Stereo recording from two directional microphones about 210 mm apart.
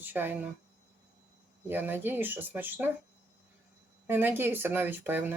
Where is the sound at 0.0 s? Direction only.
10° right (ahead or behind).